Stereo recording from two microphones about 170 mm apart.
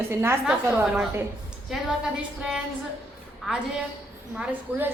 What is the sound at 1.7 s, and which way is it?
Speech, 5° right (ahead or behind).